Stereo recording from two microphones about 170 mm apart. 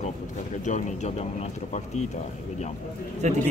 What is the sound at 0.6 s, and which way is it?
Speech, 45° left (ahead or behind).